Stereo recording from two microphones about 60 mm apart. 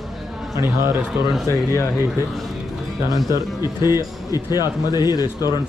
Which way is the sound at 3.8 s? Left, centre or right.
Left.